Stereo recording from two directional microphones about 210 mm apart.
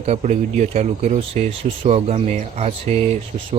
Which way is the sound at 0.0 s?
35° right (ahead or behind).